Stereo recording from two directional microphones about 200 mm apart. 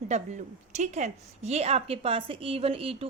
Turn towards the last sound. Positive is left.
turn(degrees=-30)  # may be behind; listen again after turning